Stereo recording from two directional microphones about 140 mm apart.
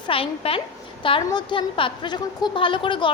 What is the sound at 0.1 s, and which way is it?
A woman's voice, 40° left (ahead or behind).